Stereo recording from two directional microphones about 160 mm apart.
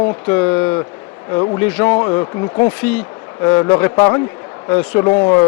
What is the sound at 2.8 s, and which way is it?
Speech, 10° left (ahead or behind).